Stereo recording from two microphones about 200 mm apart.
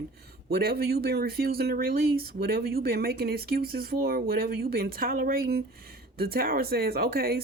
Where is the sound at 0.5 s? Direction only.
50° right (ahead or behind).